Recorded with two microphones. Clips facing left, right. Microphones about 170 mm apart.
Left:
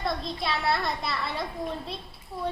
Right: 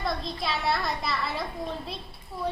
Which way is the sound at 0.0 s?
Centre (ahead or behind).